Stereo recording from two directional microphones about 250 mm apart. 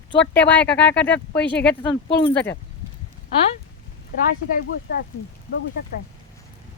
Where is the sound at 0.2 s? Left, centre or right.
Centre.